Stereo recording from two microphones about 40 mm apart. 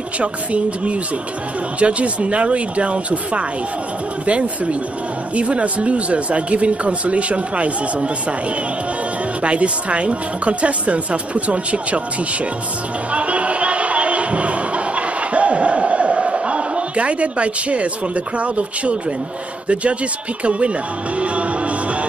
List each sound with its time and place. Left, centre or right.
0.2 s speech: right
13.1 s a sound: right
19.7 s speech: right
21.2 s music: right